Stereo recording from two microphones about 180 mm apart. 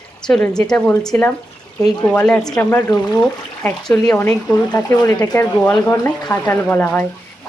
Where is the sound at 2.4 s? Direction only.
20° left (ahead or behind).